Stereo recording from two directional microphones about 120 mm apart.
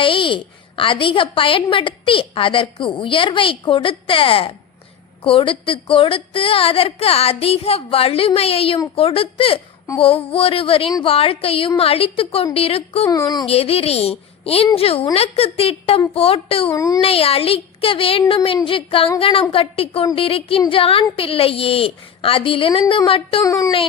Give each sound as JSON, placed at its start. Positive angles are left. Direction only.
{"t": 0.0, "sound": "a woman's voice", "side_deg": 45}
{"t": 13.1, "sound": "speech", "side_deg": 30}
{"t": 13.5, "sound": "a woman's voice", "side_deg": 55}
{"t": 16.7, "sound": "speech", "side_deg": 30}
{"t": 17.0, "sound": "a woman's voice", "side_deg": 55}
{"t": 23.4, "sound": "speech", "side_deg": 25}